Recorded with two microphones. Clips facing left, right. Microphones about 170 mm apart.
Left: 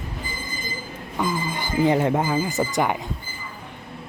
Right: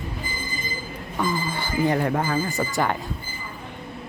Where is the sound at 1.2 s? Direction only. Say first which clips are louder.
Even; 15° left (ahead or behind).